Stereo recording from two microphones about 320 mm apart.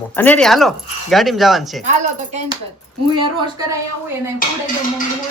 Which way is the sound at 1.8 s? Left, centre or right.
Right.